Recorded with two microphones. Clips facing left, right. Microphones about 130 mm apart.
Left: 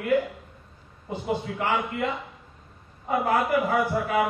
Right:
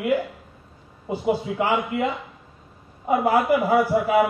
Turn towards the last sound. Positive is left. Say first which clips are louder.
# right 5 dB
turn(degrees=-5)  # may be behind; listen again after turning